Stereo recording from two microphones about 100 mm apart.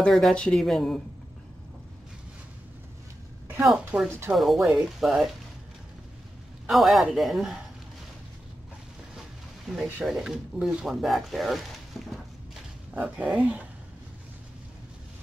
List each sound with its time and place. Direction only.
0.0 s speech: 5° left (ahead or behind)
3.6 s speech: 5° right (ahead or behind)
6.7 s speech: centre (ahead or behind)
9.7 s speech: centre (ahead or behind)
12.9 s speech: 10° right (ahead or behind)